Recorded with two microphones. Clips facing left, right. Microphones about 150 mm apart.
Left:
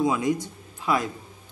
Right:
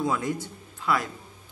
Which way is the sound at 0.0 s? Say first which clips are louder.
Left 4 dB; 15° left (ahead or behind).